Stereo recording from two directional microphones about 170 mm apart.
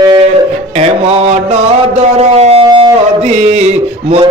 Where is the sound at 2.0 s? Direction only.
40° right (ahead or behind).